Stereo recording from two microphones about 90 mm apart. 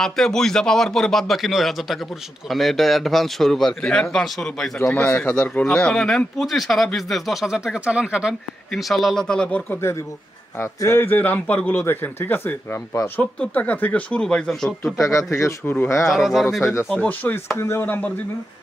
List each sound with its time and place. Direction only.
0.0 s speech: 5° left (ahead or behind)
4.8 s speech: 25° left (ahead or behind)
5.6 s speech: 5° left (ahead or behind)
10.8 s speech: 30° left (ahead or behind); by 15.0 s 5° left (ahead or behind)
15.0 s speech: 35° left (ahead or behind)
15.6 s speech: 20° left (ahead or behind)
16.0 s speech: centre (ahead or behind)
16.9 s speech: 15° left (ahead or behind)